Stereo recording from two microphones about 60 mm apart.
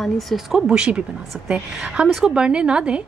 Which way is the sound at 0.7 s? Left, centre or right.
Centre.